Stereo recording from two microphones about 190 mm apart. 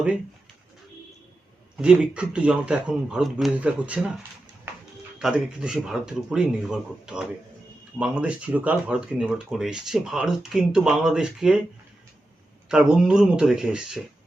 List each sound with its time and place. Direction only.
1.8 s speech: 5° right (ahead or behind)
5.2 s speech: 5° right (ahead or behind)
12.6 s speech: 5° right (ahead or behind)